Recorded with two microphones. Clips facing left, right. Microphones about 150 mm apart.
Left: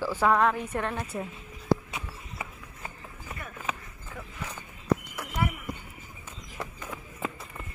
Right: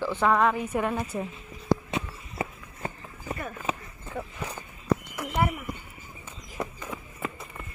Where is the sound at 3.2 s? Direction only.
35° right (ahead or behind).